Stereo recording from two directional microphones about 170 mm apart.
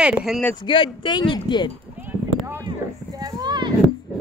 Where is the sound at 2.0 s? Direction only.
15° right (ahead or behind).